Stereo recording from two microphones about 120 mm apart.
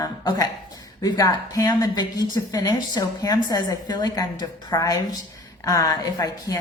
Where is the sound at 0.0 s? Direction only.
30° left (ahead or behind).